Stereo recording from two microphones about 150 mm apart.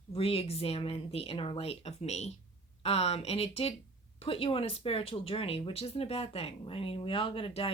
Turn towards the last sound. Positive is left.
turn(degrees=35)  # may be behind; listen again after turning